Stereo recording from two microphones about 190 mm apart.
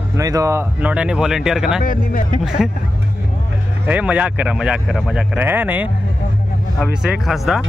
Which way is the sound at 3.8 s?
5° right (ahead or behind).